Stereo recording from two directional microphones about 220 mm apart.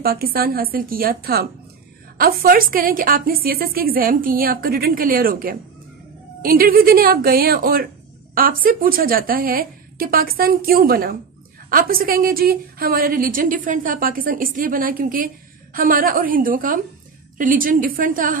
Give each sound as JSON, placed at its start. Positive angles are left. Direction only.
{"t": 0.0, "sound": "a woman's voice", "side_deg": -45}